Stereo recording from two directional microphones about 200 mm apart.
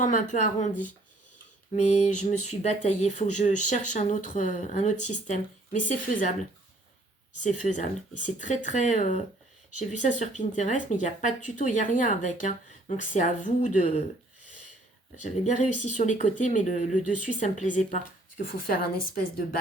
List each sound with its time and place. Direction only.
0.0 s speech: 40° left (ahead or behind)
7.3 s speech: 40° left (ahead or behind)
15.2 s speech: 35° left (ahead or behind)